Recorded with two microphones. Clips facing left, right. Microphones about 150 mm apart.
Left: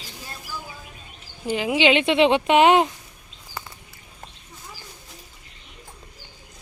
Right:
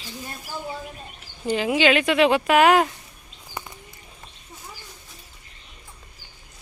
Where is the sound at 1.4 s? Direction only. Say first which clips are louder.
Even; 10° left (ahead or behind).